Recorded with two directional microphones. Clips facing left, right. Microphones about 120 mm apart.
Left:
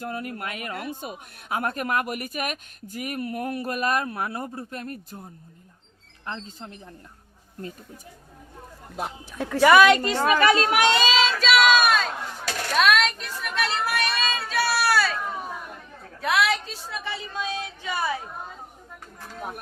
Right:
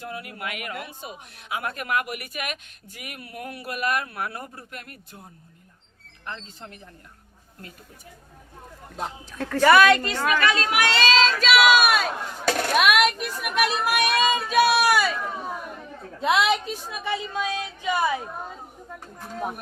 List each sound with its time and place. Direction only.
0.0 s speech: 40° left (ahead or behind)
6.2 s speech: 25° left (ahead or behind)
9.0 s a woman's voice: 10° left (ahead or behind)
10.2 s speech: 30° left (ahead or behind)
10.8 s speech: 15° left (ahead or behind); by 15.2 s 15° right (ahead or behind)
16.2 s a woman's voice: 20° right (ahead or behind)